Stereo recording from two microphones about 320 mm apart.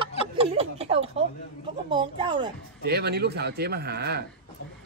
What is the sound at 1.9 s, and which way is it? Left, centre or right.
Speech, centre.